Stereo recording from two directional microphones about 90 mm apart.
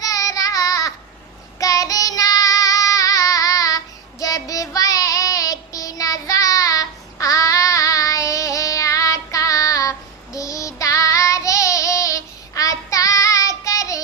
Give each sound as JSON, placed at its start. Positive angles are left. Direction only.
{"t": 0.0, "sound": "child singing", "side_deg": 40}